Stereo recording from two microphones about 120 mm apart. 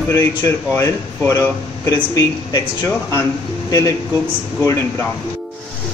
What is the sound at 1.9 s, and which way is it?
Speech, 30° left (ahead or behind).